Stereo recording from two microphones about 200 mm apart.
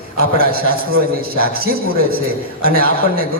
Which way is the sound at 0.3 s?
50° right (ahead or behind).